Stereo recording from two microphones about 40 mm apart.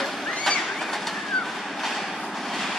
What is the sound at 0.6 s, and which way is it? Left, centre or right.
Bird, centre.